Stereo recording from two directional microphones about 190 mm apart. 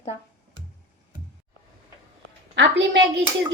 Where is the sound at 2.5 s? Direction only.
70° right (ahead or behind).